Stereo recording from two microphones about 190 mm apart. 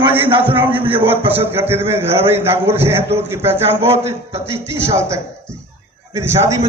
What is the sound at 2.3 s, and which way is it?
A man's voice, 10° right (ahead or behind).